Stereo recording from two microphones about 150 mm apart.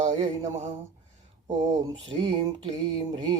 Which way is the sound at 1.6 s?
30° right (ahead or behind).